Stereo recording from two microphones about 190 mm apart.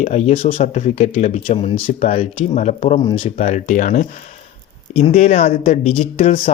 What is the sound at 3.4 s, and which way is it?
Speech, 40° left (ahead or behind).